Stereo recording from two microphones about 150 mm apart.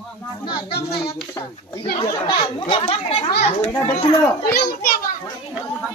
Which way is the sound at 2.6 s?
40° left (ahead or behind).